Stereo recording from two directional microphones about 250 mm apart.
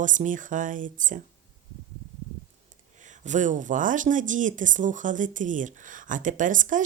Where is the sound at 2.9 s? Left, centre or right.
Right.